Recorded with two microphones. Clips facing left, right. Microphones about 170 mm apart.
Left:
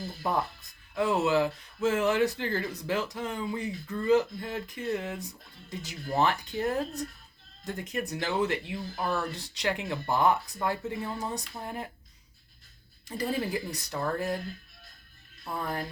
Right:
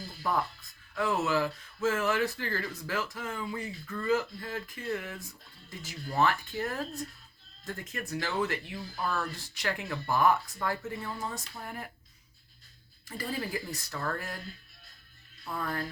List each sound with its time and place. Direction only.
0.2 s speech: 20° left (ahead or behind)
13.1 s speech: 20° left (ahead or behind)
15.5 s speech: 20° left (ahead or behind)